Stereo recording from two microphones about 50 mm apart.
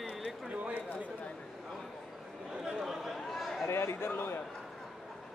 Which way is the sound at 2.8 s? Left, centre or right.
Centre.